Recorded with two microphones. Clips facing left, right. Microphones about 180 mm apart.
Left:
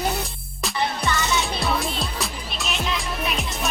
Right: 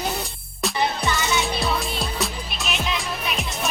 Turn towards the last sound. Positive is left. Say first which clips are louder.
# left 1 dB
turn(degrees=0)  # may be behind; listen again after turning